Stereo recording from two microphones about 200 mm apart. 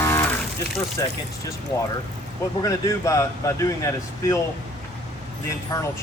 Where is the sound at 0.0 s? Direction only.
10° left (ahead or behind).